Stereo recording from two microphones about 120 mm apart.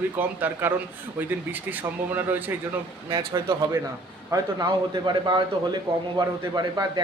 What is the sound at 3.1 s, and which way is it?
A man's voice, 35° right (ahead or behind).